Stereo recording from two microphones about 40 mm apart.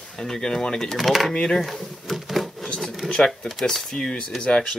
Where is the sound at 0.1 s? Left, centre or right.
Centre.